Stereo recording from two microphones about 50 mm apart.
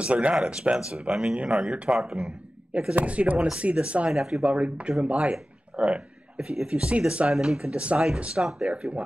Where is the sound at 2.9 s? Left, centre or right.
Right.